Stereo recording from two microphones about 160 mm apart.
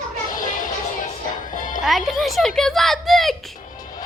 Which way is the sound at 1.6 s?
55° left (ahead or behind).